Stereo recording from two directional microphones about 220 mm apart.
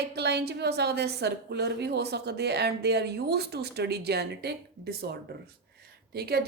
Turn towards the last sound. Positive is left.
turn(degrees=-45)  # may be behind; listen again after turning